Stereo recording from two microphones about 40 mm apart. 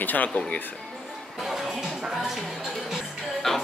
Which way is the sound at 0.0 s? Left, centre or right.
Left.